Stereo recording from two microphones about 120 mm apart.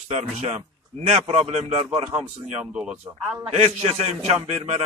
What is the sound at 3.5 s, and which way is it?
A man's voice, 60° right (ahead or behind).